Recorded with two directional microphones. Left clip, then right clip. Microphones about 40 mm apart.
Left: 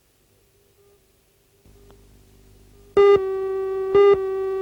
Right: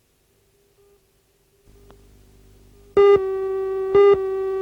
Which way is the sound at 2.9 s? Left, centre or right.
Left.